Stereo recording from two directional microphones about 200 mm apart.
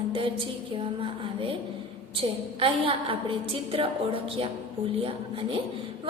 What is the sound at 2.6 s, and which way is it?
A woman's voice, 25° right (ahead or behind).